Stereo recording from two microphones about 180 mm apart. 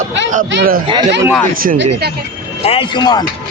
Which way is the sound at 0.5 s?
55° right (ahead or behind).